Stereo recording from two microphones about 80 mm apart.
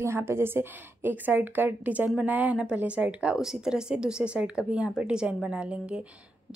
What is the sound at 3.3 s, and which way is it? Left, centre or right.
A woman's voice, centre.